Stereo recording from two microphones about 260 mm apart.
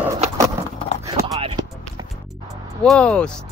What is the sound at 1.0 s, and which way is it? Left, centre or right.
Clip-clop, centre.